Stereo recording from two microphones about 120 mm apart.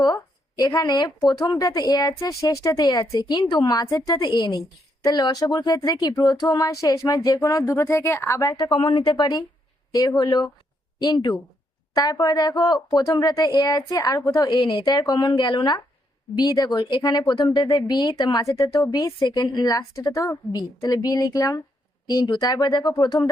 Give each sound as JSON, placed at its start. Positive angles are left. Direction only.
{"t": 0.0, "sound": "speech", "side_deg": 35}
{"t": 8.7, "sound": "speech", "side_deg": 45}